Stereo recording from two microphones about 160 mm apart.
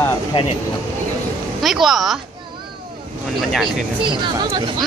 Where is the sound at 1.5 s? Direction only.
Centre (ahead or behind).